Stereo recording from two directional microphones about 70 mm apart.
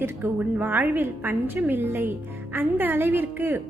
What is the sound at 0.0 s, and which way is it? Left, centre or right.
Speech, right.